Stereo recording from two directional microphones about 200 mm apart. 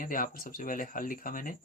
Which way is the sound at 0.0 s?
45° left (ahead or behind).